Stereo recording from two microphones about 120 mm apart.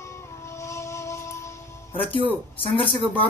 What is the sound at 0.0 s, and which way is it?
Music, 25° left (ahead or behind).